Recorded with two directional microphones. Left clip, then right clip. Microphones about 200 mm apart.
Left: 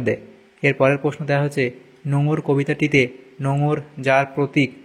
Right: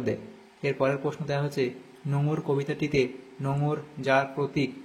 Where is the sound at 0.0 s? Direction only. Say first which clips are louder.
Left 8 dB; 25° left (ahead or behind).